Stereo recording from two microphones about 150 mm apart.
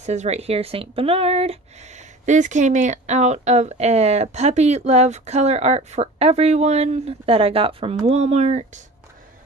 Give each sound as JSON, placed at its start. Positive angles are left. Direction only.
{"t": 0.0, "sound": "speech", "side_deg": -50}